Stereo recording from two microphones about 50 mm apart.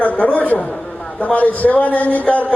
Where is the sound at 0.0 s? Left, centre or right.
Left.